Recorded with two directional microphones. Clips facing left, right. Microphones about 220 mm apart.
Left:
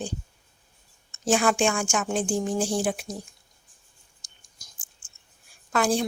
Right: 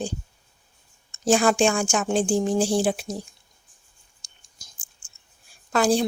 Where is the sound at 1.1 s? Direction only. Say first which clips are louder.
Right 3 dB; 35° right (ahead or behind).